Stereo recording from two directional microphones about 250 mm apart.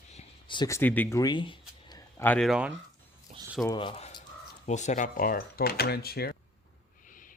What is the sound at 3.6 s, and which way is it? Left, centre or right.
Speech, centre.